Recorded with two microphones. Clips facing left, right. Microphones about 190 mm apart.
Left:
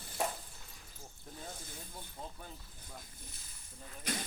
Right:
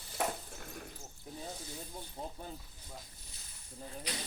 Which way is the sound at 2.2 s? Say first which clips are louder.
Right 4 dB; 25° right (ahead or behind).